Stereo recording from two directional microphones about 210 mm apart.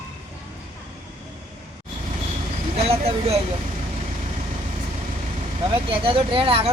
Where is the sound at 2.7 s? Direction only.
30° right (ahead or behind).